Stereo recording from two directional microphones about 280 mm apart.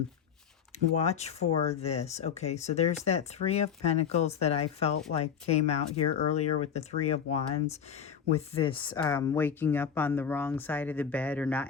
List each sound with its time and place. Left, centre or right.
1.0 s speech: left
6.3 s speech: left
7.1 s speech: left; by 11.7 s centre